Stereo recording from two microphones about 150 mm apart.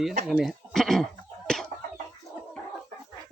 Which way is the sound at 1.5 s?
5° left (ahead or behind).